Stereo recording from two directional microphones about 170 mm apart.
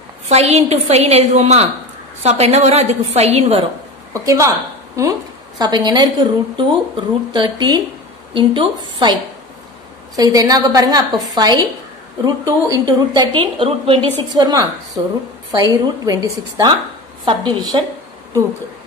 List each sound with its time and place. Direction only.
0.3 s a woman's voice: 40° right (ahead or behind)
4.1 s a woman's voice: 20° right (ahead or behind)
10.1 s a woman's voice: 20° right (ahead or behind)